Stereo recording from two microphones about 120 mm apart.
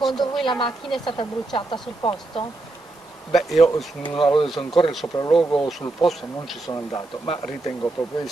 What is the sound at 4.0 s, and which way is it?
Speech, 45° left (ahead or behind).